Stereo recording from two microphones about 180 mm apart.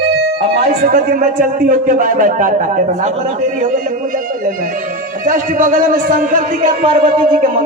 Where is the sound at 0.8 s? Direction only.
50° right (ahead or behind).